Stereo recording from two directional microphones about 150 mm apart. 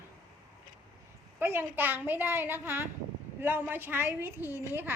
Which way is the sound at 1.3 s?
15° right (ahead or behind).